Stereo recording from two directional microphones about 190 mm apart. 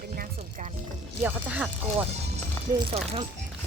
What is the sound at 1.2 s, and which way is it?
Speech, 10° right (ahead or behind).